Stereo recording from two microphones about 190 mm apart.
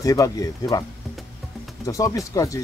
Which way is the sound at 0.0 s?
15° left (ahead or behind).